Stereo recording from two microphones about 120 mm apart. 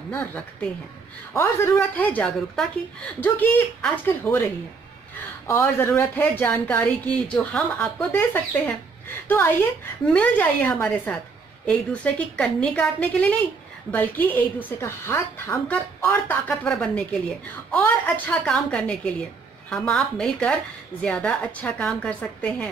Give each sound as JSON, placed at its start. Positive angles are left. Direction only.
{"t": 0.1, "sound": "a woman's voice", "side_deg": 15}
{"t": 3.2, "sound": "speech", "side_deg": 15}
{"t": 5.5, "sound": "speech", "side_deg": 20}